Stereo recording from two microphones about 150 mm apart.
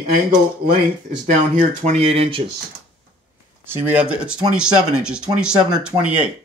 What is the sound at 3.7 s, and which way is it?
Speech, 10° right (ahead or behind).